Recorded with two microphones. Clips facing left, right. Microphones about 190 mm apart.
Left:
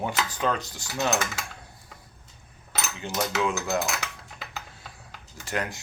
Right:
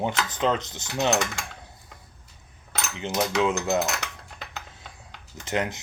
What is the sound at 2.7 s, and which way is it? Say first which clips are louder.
Cutlery: right 2 dB; centre (ahead or behind).